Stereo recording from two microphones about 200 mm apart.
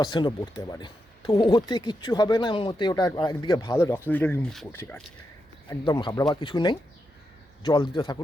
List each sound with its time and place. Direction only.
0.0 s speech: 25° left (ahead or behind)
5.6 s speech: 20° left (ahead or behind)